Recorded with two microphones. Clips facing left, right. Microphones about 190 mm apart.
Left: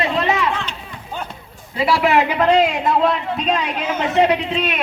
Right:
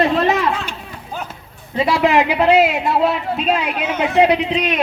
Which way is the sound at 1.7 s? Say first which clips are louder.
Right 1 dB; 20° right (ahead or behind).